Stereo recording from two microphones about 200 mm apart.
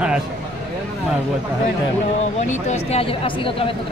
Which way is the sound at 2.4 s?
35° left (ahead or behind).